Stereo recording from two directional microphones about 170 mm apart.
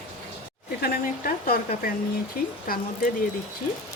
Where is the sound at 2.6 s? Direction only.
55° left (ahead or behind).